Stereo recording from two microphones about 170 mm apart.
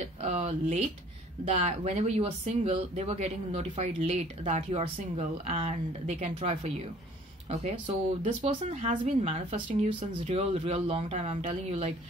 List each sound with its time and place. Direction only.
0.0 s speech: 40° right (ahead or behind)